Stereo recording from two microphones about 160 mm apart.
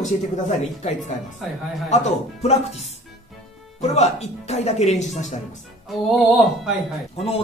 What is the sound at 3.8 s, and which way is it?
Speech, 40° left (ahead or behind).